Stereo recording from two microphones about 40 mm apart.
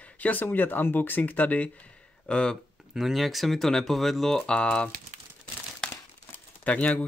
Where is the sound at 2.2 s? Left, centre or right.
Left.